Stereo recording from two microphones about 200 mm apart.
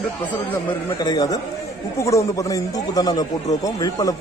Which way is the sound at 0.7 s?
20° left (ahead or behind).